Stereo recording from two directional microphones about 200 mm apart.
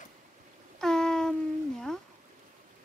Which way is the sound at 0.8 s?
5° left (ahead or behind).